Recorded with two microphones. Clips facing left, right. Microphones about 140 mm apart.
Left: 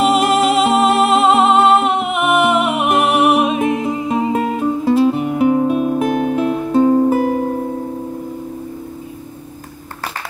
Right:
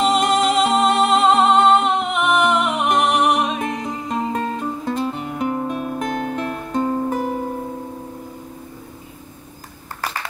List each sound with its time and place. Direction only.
0.0 s music: 5° left (ahead or behind)